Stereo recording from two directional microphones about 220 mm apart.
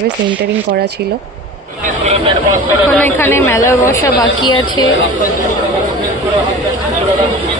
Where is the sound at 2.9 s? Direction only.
10° left (ahead or behind).